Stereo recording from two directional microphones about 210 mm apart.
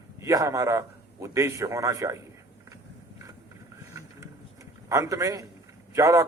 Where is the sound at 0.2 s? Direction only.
15° right (ahead or behind).